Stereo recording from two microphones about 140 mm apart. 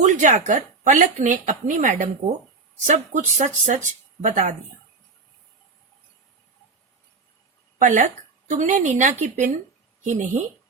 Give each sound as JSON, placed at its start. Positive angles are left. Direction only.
{"t": 0.0, "sound": "speech", "side_deg": -60}
{"t": 7.8, "sound": "speech", "side_deg": -65}